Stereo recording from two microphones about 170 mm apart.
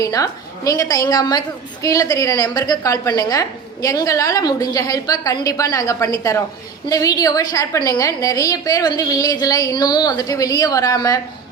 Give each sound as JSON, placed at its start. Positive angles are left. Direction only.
{"t": 0.0, "sound": "a woman's voice", "side_deg": 20}